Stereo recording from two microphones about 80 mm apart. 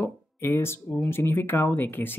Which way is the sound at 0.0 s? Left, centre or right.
Left.